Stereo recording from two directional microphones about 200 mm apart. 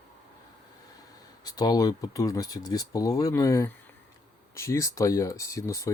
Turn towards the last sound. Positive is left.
turn(degrees=15)  # may be behind; listen again after turning